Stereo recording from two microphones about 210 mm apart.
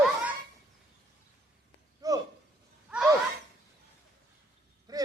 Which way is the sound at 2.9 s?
5° right (ahead or behind).